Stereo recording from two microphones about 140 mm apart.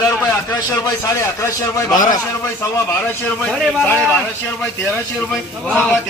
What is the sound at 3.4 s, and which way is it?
Speech, 10° left (ahead or behind).